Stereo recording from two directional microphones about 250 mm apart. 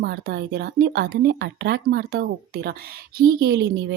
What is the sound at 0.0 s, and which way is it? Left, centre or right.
Speech, right.